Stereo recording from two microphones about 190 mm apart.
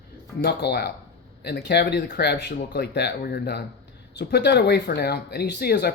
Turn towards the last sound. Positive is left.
turn(degrees=55)  # may be behind; listen again after turning